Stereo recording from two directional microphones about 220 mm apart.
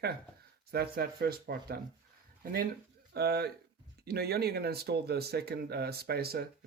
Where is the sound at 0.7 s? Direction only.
45° right (ahead or behind).